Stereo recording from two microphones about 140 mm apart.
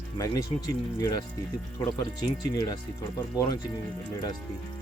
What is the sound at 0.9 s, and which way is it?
Speech, 25° left (ahead or behind).